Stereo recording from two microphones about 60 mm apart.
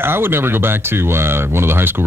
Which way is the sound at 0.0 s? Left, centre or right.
Right.